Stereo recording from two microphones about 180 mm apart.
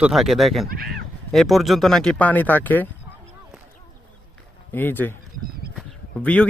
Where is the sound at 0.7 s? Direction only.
55° right (ahead or behind).